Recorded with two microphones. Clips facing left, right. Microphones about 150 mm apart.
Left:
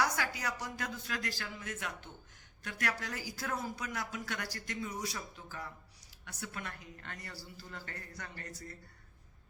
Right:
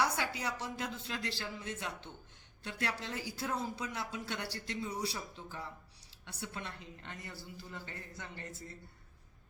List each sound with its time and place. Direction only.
0.0 s speech: 25° right (ahead or behind)